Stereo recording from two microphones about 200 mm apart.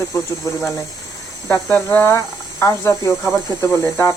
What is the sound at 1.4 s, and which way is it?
Speech, 10° left (ahead or behind).